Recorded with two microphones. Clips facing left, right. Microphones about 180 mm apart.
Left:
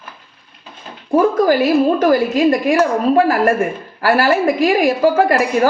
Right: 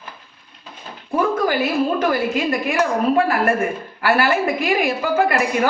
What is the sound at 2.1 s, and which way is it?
A woman's voice, 35° left (ahead or behind).